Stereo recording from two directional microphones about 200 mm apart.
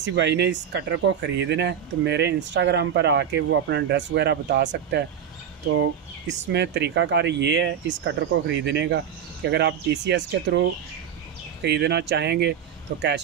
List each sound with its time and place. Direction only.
0.0 s speech: 60° right (ahead or behind)
5.7 s speech: 60° right (ahead or behind)